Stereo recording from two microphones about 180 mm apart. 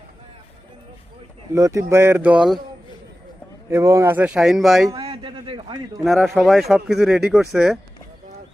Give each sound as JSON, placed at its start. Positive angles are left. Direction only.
{"t": 1.5, "sound": "speech", "side_deg": -15}
{"t": 3.7, "sound": "speech", "side_deg": -15}
{"t": 4.9, "sound": "a sound", "side_deg": -30}
{"t": 6.1, "sound": "speech", "side_deg": 0}